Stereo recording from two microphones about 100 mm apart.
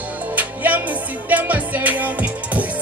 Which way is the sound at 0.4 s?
15° right (ahead or behind).